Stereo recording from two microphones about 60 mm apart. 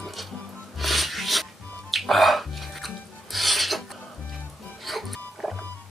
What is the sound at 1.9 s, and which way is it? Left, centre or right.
Filing, centre.